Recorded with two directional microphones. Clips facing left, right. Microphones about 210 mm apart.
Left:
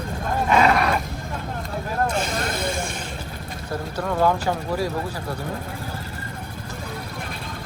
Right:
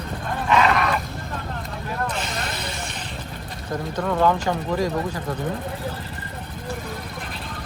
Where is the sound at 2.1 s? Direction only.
50° left (ahead or behind).